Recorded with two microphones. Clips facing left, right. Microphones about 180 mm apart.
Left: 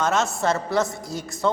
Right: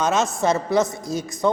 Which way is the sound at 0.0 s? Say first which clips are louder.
Right 2 dB; 20° right (ahead or behind).